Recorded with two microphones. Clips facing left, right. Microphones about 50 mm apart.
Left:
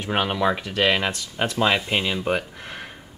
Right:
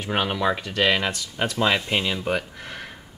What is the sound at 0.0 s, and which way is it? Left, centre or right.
Speech, centre.